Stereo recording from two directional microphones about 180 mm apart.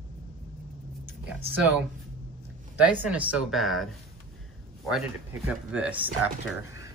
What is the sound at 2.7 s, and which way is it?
Speech, 10° right (ahead or behind).